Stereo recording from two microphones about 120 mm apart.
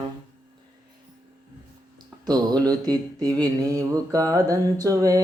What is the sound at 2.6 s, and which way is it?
Speech, 30° right (ahead or behind).